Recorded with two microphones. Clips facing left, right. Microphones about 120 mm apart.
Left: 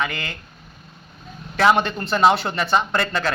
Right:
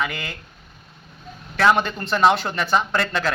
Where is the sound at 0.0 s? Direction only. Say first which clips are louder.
Left 1 dB; 5° right (ahead or behind).